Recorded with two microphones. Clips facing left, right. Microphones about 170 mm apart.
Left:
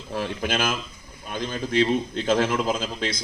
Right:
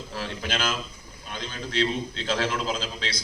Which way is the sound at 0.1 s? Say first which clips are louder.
Left 6 dB; 55° left (ahead or behind).